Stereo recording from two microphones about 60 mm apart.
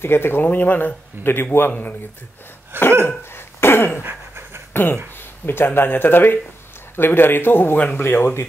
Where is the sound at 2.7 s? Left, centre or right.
Right.